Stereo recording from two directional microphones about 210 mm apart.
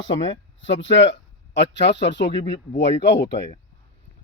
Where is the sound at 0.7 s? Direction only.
60° left (ahead or behind).